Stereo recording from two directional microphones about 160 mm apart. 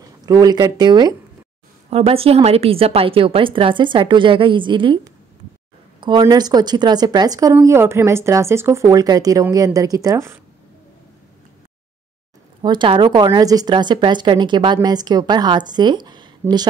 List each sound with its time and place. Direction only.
0.0 s speech: 25° right (ahead or behind)
1.9 s a woman's voice: 40° right (ahead or behind); by 10.3 s 20° right (ahead or behind)
12.6 s a woman's voice: 30° right (ahead or behind)